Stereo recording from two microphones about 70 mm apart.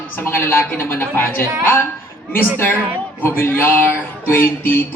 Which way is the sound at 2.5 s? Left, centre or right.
Left.